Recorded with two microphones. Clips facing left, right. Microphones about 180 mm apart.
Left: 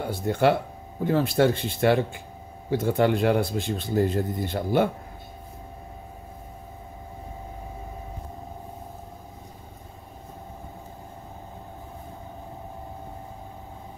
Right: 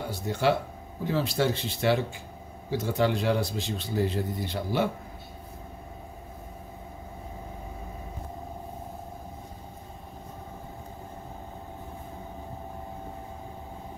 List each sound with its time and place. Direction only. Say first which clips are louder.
0.0 s speech: left 4 dB; 55° left (ahead or behind)